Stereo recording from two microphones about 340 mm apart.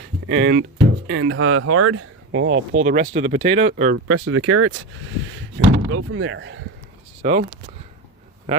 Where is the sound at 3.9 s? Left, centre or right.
Right.